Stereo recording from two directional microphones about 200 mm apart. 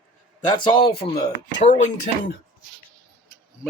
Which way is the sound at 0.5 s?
25° left (ahead or behind).